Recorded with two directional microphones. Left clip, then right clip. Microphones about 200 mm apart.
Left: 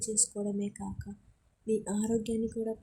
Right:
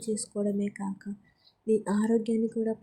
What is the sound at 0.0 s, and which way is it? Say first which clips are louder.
Speech: right 2 dB; centre (ahead or behind).